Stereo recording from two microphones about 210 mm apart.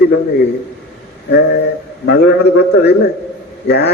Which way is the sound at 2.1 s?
50° left (ahead or behind).